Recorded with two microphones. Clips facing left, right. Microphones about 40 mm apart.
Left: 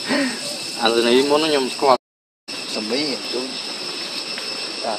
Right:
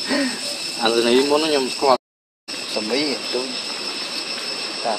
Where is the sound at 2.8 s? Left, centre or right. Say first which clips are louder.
Right 1 dB; centre.